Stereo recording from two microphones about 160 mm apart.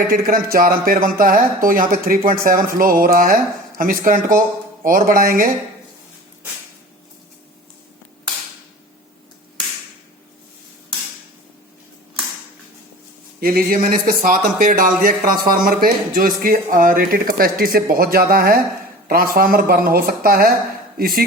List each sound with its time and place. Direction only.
0.1 s speech: 65° right (ahead or behind)
13.4 s speech: 65° right (ahead or behind)